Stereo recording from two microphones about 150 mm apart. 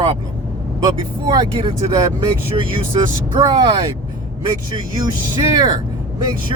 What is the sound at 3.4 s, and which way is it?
Speech, 30° right (ahead or behind).